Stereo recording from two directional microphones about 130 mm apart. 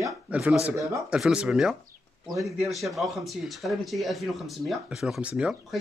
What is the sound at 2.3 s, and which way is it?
Speech, 25° right (ahead or behind).